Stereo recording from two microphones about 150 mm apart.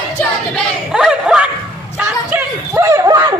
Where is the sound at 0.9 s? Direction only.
5° right (ahead or behind); by 3.2 s 20° right (ahead or behind).